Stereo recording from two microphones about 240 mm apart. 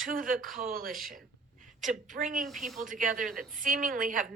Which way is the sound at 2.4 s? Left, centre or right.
Centre.